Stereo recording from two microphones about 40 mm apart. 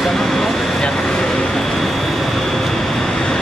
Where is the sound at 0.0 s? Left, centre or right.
Centre.